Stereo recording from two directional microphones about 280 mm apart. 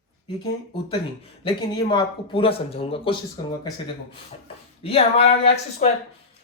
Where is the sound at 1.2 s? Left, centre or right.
Centre.